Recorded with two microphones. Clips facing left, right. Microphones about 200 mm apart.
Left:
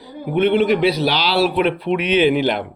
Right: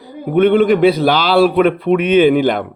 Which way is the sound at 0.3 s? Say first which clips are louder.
Right 5 dB; 50° right (ahead or behind).